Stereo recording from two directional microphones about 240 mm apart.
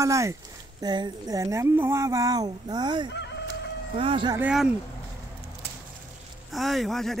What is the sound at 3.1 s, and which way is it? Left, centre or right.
Chicken, left.